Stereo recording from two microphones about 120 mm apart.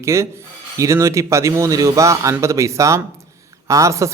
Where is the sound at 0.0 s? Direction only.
25° right (ahead or behind).